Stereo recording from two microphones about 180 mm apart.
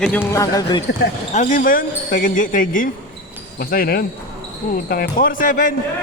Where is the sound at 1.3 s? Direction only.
45° left (ahead or behind).